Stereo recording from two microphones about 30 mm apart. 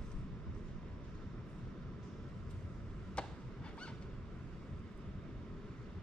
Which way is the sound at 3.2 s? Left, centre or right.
Left.